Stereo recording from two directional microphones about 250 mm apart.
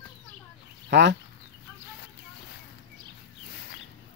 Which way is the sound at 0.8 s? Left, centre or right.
Right.